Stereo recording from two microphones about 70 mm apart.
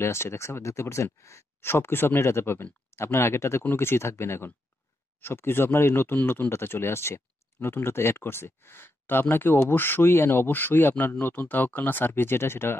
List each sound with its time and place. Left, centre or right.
0.0 s speech: left